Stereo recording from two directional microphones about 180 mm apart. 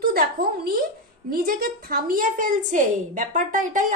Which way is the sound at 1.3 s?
55° right (ahead or behind).